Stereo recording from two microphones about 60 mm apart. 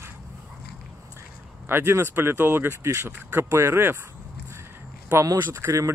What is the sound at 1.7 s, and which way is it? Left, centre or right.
Speech, right.